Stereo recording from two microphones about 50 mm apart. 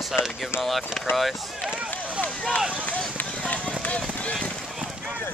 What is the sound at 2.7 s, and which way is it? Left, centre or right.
Speech, left.